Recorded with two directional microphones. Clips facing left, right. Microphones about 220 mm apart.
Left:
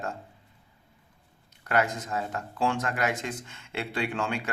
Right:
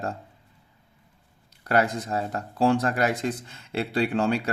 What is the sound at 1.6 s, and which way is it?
Speech, 35° right (ahead or behind).